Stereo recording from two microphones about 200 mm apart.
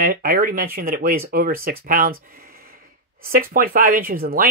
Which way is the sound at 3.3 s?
45° right (ahead or behind).